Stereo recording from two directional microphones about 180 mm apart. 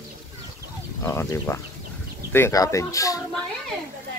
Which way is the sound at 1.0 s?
15° left (ahead or behind).